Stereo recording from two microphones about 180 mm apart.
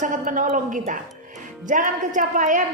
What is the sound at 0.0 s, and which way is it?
A woman's voice, 45° right (ahead or behind).